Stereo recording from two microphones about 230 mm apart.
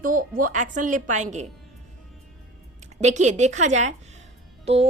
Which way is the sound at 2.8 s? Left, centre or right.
Right.